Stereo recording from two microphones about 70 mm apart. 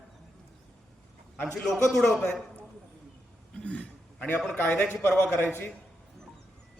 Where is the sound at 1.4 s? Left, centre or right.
Centre.